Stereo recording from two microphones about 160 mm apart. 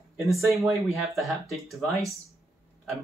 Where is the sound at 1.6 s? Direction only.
20° right (ahead or behind).